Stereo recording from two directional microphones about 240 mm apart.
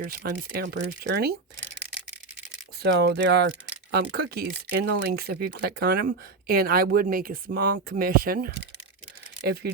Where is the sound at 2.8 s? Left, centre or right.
Right.